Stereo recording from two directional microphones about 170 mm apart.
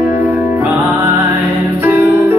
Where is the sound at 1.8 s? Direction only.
10° right (ahead or behind).